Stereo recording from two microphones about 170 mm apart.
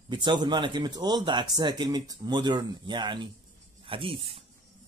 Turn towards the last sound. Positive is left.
turn(degrees=-35)  # may be behind; listen again after turning